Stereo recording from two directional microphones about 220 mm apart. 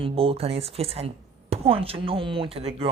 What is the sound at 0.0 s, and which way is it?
A woman's voice, 25° right (ahead or behind).